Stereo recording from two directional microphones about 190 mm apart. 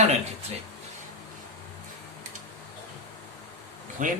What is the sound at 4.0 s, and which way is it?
Speech, 45° right (ahead or behind).